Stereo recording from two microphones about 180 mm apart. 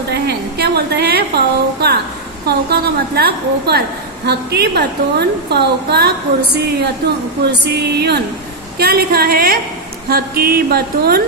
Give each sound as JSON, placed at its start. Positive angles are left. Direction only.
{"t": 0.1, "sound": "a sound", "side_deg": -65}
{"t": 2.5, "sound": "a woman's voice", "side_deg": -65}
{"t": 7.4, "sound": "a woman's voice", "side_deg": -65}